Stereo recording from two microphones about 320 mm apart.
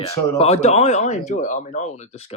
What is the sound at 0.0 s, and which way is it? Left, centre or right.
Speech, centre.